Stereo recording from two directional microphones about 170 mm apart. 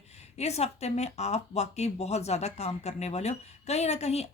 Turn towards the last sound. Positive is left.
turn(degrees=40)  # may be behind; listen again after turning